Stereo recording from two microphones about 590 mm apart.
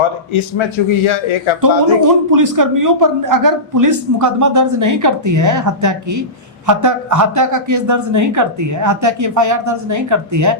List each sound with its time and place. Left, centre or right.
0.0 s a man's voice: left
2.3 s speech: right